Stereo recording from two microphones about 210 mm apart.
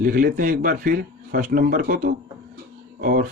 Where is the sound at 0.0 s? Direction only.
45° right (ahead or behind).